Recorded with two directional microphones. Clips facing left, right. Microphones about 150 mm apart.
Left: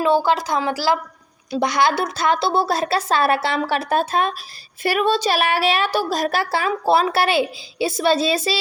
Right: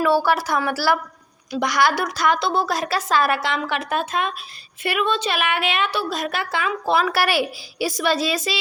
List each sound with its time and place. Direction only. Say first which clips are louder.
0.0 s a woman's voice: left 1 dB; 20° left (ahead or behind)